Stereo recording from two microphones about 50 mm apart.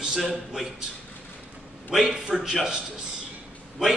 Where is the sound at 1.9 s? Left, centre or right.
Centre.